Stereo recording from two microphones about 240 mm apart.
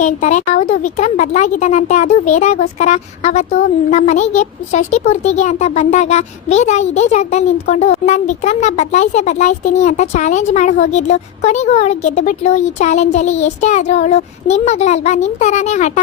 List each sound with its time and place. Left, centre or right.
0.0 s speech: left